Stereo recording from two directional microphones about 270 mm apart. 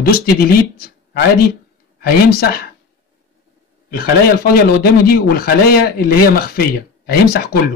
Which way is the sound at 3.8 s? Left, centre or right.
Left.